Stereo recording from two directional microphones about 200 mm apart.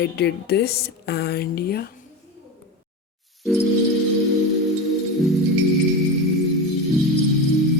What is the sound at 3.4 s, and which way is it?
Music, centre (ahead or behind).